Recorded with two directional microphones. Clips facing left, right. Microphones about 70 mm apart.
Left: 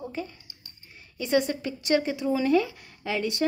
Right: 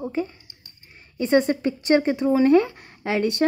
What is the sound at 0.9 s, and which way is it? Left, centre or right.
Speech, right.